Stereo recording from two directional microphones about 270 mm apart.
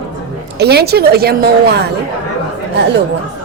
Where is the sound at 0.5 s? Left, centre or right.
Right.